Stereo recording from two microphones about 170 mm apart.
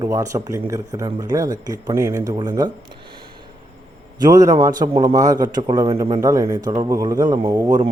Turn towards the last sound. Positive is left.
turn(degrees=-25)  # may be behind; listen again after turning